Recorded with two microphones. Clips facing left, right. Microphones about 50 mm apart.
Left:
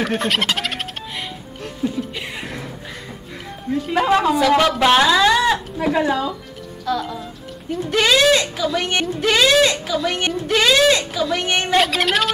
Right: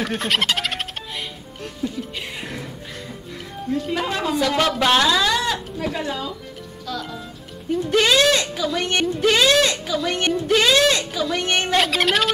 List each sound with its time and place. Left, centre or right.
0.0 s speech: centre
1.1 s music: centre
3.9 s speech: left
4.4 s a woman's voice: centre
4.9 s speech: centre
6.9 s a woman's voice: centre